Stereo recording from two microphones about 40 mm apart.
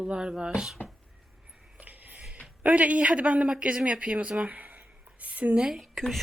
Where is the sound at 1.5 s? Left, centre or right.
Right.